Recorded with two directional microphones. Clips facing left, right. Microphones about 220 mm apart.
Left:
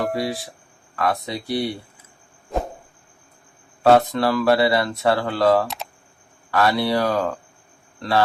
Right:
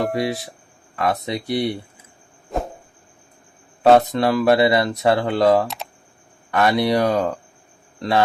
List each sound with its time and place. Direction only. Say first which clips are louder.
0.9 s speech: right 1 dB; 20° right (ahead or behind)
2.5 s a sound: even; centre (ahead or behind)
3.8 s speech: right 2 dB; 20° right (ahead or behind)
5.6 s typing: right 1 dB; centre (ahead or behind)
6.5 s speech: right 2 dB; 20° right (ahead or behind)